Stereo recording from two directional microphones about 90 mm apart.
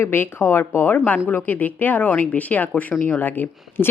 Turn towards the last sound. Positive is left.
turn(degrees=20)  # may be behind; listen again after turning